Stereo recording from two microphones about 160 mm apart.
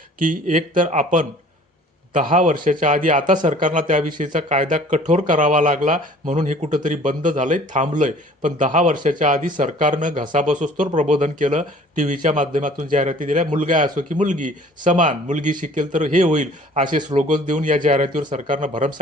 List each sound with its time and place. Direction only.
0.2 s a man's voice: 55° right (ahead or behind)